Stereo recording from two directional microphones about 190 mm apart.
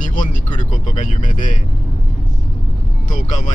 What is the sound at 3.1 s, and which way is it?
Speech, 40° left (ahead or behind).